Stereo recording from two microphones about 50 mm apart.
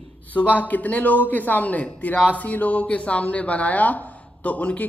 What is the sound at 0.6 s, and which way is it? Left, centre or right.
Speech, left.